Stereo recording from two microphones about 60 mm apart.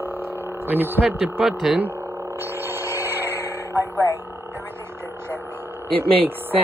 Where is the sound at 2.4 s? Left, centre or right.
Right.